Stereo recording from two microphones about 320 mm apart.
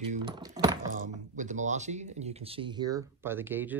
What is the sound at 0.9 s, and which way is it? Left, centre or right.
Speech, right.